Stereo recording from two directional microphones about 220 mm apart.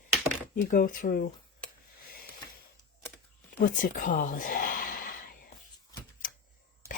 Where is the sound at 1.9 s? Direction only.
40° left (ahead or behind).